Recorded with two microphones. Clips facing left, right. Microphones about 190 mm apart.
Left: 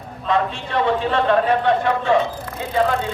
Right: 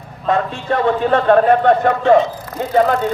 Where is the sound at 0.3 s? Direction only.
50° right (ahead or behind).